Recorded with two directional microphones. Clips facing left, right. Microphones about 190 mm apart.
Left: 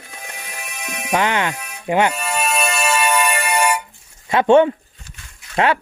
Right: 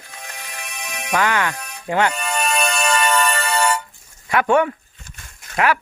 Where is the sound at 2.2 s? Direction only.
5° left (ahead or behind).